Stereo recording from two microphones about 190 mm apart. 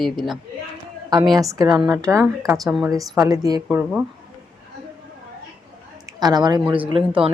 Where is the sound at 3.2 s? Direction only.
20° right (ahead or behind).